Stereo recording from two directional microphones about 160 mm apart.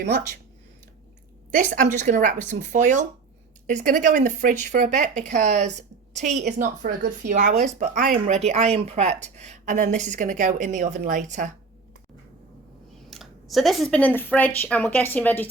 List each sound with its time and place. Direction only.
1.5 s a woman's voice: 50° right (ahead or behind)
8.4 s a woman's voice: 40° right (ahead or behind)
13.1 s speech: centre (ahead or behind)